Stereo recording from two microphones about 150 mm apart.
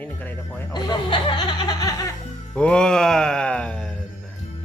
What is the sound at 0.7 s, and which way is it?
Laughter, 30° left (ahead or behind).